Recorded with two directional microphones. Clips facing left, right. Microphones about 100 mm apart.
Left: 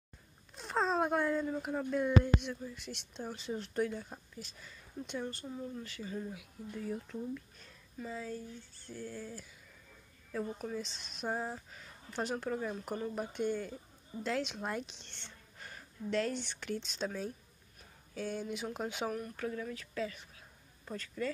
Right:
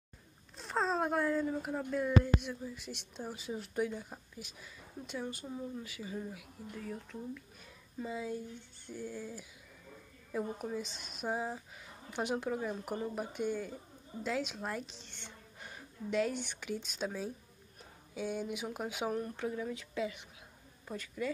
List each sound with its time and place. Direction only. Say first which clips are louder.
0.6 s a sound: left 1 dB; centre (ahead or behind)
2.4 s speech: even; 5° right (ahead or behind)
7.6 s a woman's voice: right 2 dB; 15° right (ahead or behind)
19.0 s speech: right 2 dB; 25° right (ahead or behind)